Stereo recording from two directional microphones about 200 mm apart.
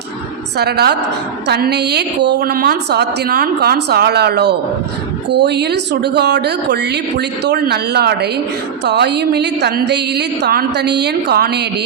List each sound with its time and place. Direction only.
0.5 s a woman's voice: 55° right (ahead or behind)